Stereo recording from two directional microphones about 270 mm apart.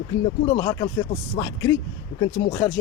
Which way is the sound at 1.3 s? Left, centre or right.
Centre.